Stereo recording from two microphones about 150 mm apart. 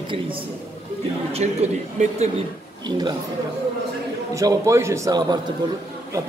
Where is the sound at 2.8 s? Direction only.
30° right (ahead or behind).